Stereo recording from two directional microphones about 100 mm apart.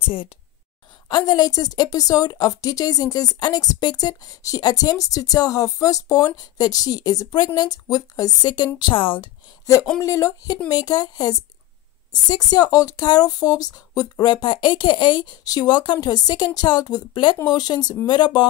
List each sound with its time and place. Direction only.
1.0 s a woman's voice: 40° left (ahead or behind)
10.0 s a woman's voice: 30° left (ahead or behind); by 18.5 s 50° left (ahead or behind)